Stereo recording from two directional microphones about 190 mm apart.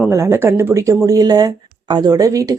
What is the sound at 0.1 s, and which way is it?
Speech, 15° right (ahead or behind).